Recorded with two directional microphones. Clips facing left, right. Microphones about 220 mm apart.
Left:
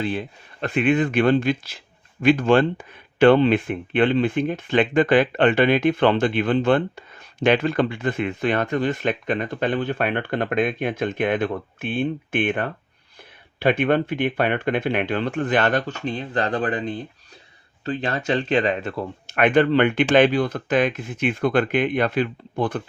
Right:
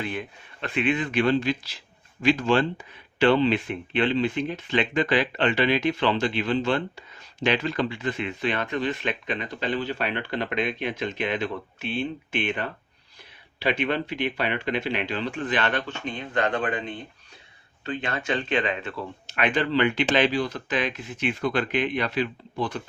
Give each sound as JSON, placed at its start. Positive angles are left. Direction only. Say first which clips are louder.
{"t": 0.0, "sound": "speech", "louder": "left 5 dB", "side_deg": 30}
{"t": 0.7, "sound": "speech", "louder": "left 5 dB", "side_deg": 50}